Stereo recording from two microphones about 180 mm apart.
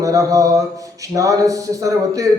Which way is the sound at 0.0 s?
20° right (ahead or behind).